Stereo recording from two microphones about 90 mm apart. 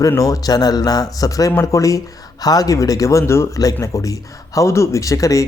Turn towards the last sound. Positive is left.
turn(degrees=35)  # may be behind; listen again after turning